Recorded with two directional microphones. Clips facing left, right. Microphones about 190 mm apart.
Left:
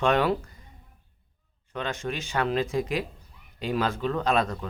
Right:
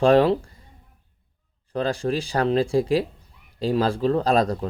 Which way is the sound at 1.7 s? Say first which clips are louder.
Right 8 dB; 35° right (ahead or behind).